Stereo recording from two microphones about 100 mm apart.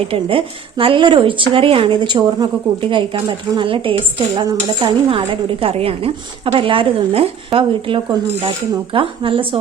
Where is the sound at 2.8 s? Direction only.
55° right (ahead or behind).